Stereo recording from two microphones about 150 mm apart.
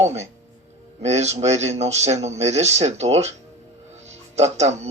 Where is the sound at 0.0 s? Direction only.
50° right (ahead or behind).